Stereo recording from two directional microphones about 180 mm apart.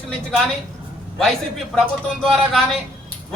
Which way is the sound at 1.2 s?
Centre (ahead or behind).